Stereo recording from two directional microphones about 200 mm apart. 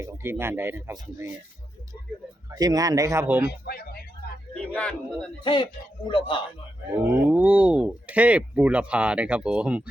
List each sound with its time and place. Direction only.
0.0 s speech: 10° right (ahead or behind)
2.6 s speech: 20° right (ahead or behind)
3.5 s speech: 50° left (ahead or behind)
4.6 s speech: 5° left (ahead or behind)
5.4 s a man's voice: 25° left (ahead or behind)
7.0 s speech: 10° right (ahead or behind)